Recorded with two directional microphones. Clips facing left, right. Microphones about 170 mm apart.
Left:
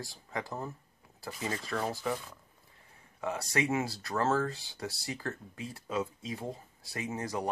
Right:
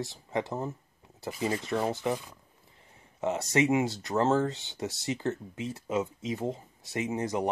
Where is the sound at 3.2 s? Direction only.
25° right (ahead or behind).